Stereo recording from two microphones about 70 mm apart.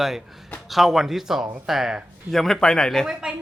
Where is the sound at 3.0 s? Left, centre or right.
Centre.